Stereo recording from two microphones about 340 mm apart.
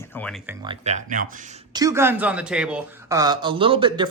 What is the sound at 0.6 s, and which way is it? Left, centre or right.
Speech, centre.